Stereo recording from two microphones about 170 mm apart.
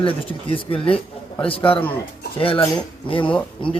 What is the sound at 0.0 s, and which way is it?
Speech, 30° left (ahead or behind).